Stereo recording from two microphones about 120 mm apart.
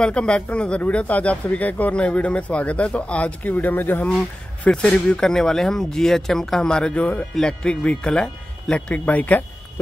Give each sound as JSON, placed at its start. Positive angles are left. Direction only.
{"t": 0.0, "sound": "speech", "side_deg": 10}